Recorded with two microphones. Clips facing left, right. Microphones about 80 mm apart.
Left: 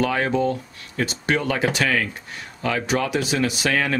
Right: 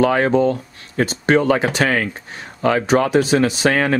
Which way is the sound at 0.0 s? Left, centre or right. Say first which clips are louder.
Right 6 dB; right.